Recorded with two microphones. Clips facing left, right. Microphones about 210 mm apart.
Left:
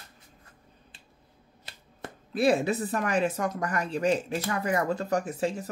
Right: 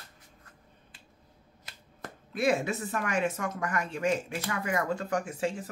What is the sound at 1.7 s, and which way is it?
Speech, 30° left (ahead or behind).